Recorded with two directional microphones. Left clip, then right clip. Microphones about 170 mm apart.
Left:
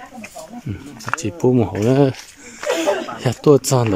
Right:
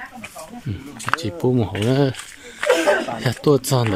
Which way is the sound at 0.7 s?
10° left (ahead or behind).